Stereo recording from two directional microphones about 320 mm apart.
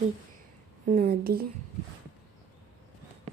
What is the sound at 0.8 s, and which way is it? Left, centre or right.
Speech, right.